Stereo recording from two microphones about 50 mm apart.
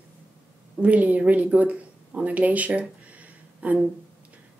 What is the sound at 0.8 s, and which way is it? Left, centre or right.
Speech, right.